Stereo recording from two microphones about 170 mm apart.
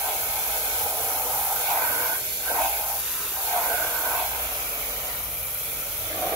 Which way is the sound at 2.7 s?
5° right (ahead or behind).